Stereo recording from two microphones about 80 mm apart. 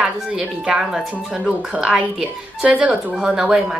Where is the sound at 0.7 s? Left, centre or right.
Centre.